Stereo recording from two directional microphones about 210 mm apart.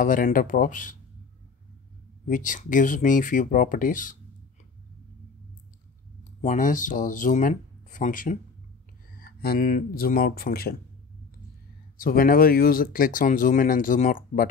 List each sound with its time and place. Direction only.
0.0 s speech: 40° left (ahead or behind)
2.2 s speech: 40° left (ahead or behind)
6.4 s speech: 40° left (ahead or behind)
12.0 s speech: 40° left (ahead or behind)